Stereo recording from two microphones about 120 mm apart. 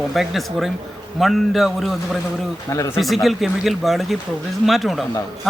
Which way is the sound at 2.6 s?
25° left (ahead or behind).